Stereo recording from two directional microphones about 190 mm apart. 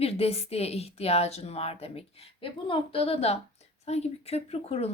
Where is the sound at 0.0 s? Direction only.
30° left (ahead or behind).